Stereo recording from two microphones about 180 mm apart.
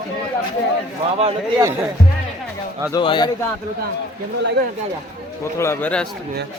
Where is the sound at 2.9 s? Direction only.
25° left (ahead or behind).